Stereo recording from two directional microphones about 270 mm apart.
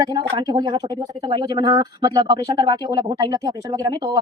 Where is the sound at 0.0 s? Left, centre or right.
Centre.